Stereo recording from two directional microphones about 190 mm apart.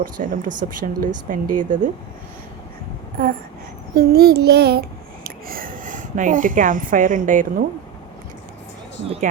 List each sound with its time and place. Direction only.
0.0 s speech: 45° right (ahead or behind)
3.9 s a child's voice: 55° right (ahead or behind)